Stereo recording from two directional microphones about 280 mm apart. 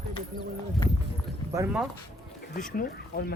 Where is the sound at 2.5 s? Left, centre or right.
Left.